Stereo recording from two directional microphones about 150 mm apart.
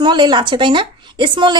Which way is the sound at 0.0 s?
30° right (ahead or behind).